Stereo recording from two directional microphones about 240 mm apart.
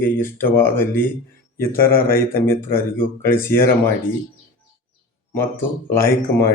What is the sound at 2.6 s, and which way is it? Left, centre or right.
Speech, centre.